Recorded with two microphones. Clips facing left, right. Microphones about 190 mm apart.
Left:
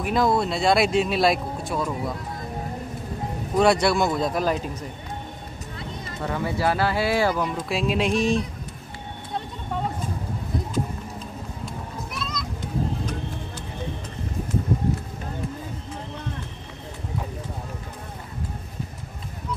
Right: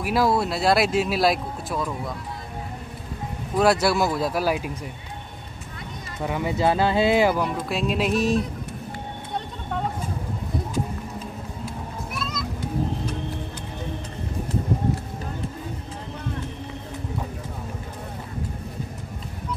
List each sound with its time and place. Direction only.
0.0 s speech: 5° right (ahead or behind)
3.5 s speech: 5° right (ahead or behind)
6.2 s speech: 15° right (ahead or behind)
7.3 s speech: centre (ahead or behind)
11.6 s children playing: 5° right (ahead or behind)